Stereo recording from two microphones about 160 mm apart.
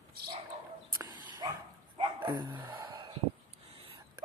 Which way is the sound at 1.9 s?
35° right (ahead or behind).